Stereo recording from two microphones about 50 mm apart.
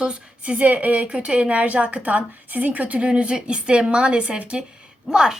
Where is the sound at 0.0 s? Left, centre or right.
Right.